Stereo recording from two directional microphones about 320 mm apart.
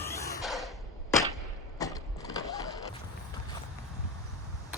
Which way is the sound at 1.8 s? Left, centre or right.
Centre.